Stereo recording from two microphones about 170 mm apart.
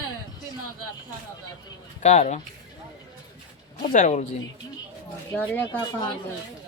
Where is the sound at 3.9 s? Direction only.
45° left (ahead or behind).